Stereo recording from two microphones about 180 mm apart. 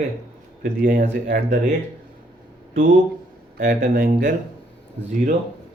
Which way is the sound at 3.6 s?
50° right (ahead or behind).